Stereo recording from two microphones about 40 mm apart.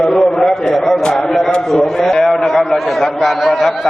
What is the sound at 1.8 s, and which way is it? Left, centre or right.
A man's voice, centre.